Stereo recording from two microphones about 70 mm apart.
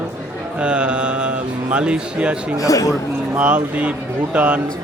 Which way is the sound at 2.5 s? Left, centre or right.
Left.